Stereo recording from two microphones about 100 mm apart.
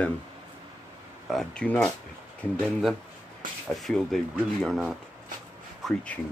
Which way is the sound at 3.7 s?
Centre (ahead or behind).